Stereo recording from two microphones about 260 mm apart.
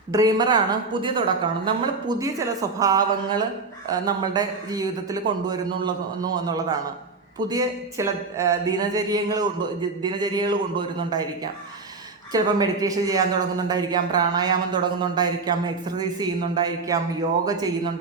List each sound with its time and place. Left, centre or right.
0.1 s speech: centre
12.3 s speech: centre